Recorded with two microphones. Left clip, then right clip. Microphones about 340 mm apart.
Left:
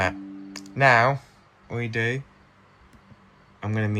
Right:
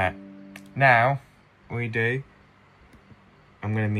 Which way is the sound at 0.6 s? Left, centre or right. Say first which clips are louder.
Left 1 dB; centre.